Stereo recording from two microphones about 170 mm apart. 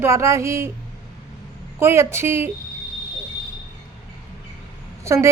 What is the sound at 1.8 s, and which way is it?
Speech, 15° right (ahead or behind).